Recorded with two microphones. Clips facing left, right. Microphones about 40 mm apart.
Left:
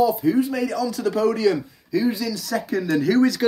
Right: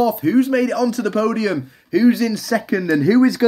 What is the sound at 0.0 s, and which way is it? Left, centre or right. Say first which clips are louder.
Speech: right 3 dB; right.